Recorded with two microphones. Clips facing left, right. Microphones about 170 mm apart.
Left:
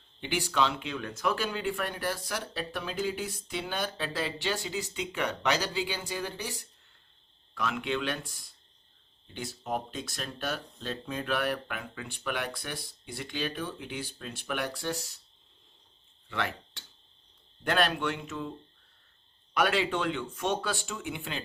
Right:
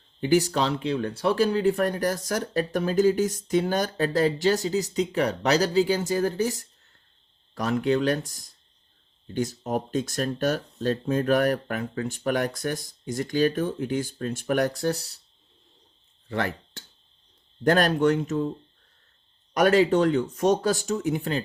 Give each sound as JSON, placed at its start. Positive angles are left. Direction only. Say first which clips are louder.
{"t": 0.2, "sound": "speech", "louder": "right 7 dB", "side_deg": -40}
{"t": 16.3, "sound": "speech", "louder": "right 6 dB", "side_deg": -40}
{"t": 19.5, "sound": "speech", "louder": "right 9 dB", "side_deg": -40}